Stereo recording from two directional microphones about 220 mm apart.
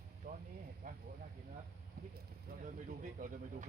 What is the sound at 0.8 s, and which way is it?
Speech, 35° right (ahead or behind).